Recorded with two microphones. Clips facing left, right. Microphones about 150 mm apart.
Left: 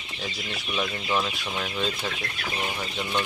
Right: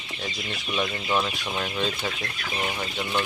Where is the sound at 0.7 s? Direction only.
Centre (ahead or behind).